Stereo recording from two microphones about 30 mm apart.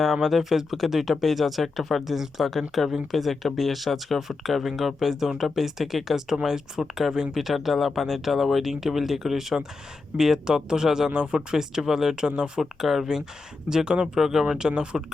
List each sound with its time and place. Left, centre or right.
0.2 s speech: centre
11.1 s speech: right
11.3 s speech: right
12.1 s speech: right
12.8 s speech: centre
14.6 s speech: right